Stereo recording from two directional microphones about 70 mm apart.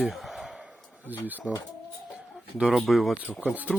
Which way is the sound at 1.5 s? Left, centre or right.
Centre.